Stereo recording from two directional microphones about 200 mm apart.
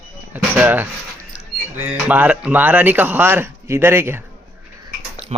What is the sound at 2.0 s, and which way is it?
Speech, 5° right (ahead or behind).